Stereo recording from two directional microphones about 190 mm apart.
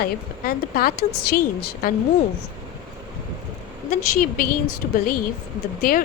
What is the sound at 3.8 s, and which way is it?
Speech, 45° left (ahead or behind).